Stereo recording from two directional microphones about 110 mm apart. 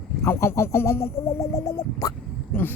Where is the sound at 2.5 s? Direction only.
20° left (ahead or behind).